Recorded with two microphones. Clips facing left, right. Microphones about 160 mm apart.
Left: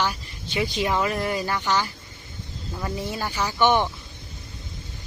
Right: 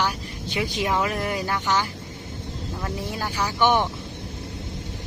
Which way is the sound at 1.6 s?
15° right (ahead or behind).